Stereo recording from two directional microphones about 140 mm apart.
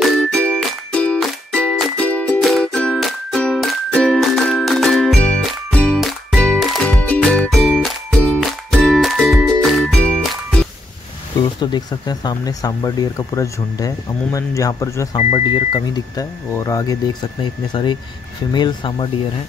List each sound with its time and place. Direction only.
0.3 s music: 10° left (ahead or behind)
11.6 s speech: 30° left (ahead or behind)
15.1 s speech: 35° left (ahead or behind)